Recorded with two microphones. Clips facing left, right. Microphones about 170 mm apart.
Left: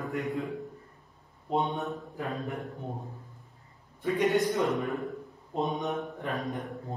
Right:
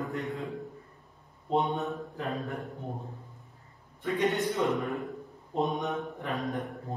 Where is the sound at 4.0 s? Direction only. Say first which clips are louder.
Left 1 dB; 15° left (ahead or behind).